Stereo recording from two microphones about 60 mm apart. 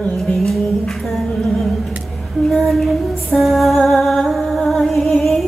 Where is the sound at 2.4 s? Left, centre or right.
Centre.